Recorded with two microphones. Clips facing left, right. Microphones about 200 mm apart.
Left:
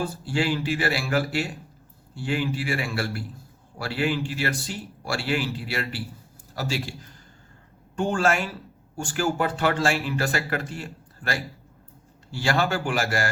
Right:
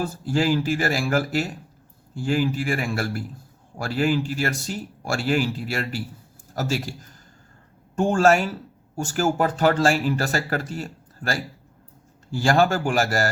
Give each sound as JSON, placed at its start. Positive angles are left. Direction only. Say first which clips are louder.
{"t": 0.3, "sound": "speech", "louder": "right 4 dB", "side_deg": -40}